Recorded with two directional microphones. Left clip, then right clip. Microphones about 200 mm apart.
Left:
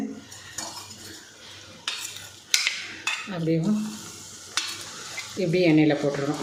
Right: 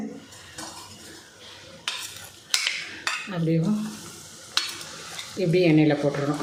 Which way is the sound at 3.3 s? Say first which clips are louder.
Left 1 dB; centre (ahead or behind).